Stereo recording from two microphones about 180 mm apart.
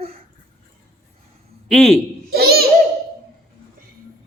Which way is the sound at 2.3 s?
60° right (ahead or behind).